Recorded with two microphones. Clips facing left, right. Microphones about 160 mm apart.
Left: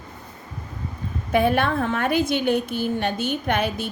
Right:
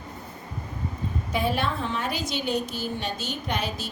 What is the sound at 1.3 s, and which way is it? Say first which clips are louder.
A woman's voice: left 7 dB; 55° left (ahead or behind).